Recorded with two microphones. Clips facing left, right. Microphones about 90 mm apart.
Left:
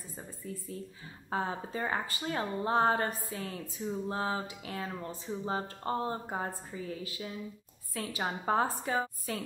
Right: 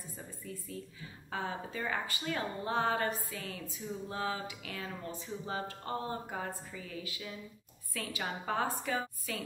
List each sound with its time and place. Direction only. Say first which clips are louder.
1.3 s a woman's voice: left 4 dB; 35° left (ahead or behind)